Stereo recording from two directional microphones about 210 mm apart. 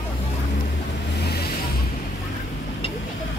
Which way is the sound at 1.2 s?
50° left (ahead or behind).